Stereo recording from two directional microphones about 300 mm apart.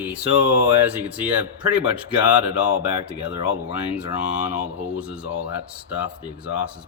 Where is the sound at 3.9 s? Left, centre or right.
Centre.